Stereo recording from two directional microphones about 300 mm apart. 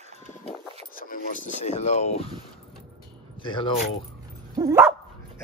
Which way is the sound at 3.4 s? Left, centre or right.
Centre.